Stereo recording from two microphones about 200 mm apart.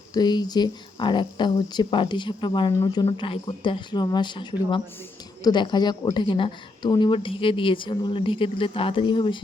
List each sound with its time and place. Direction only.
0.1 s speech: 20° left (ahead or behind)